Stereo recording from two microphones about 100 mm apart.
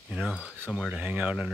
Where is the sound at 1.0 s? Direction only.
15° right (ahead or behind).